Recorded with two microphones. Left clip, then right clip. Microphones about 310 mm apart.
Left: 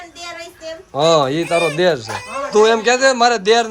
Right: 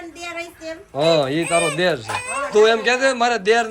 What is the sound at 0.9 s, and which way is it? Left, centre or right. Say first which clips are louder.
A man's voice: left 4 dB; centre.